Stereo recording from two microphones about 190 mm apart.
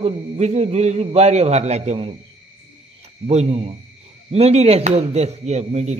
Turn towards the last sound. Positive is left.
turn(degrees=-35)  # may be behind; listen again after turning